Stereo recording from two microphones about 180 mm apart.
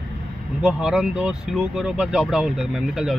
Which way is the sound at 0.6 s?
5° right (ahead or behind).